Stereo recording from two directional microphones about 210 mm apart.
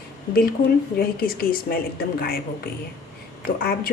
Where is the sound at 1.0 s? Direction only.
45° left (ahead or behind).